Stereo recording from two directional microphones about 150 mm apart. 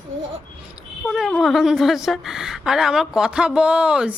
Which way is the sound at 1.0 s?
Centre (ahead or behind).